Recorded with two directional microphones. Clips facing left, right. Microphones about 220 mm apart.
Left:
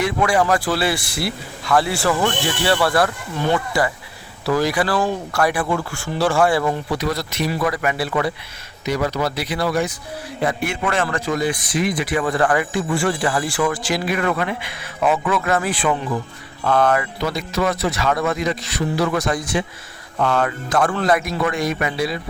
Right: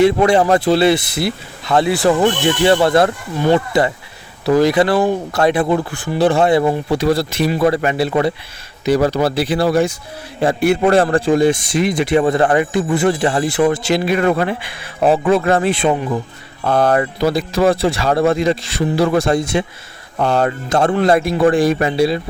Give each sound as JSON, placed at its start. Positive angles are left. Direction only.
{"t": 0.0, "sound": "speech", "side_deg": -25}